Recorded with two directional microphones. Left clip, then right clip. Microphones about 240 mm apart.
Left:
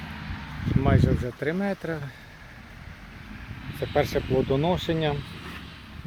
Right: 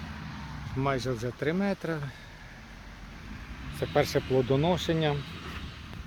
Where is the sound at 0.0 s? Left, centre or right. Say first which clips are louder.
Left 4 dB; left.